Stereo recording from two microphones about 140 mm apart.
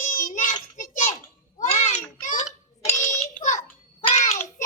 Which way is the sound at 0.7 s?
60° left (ahead or behind).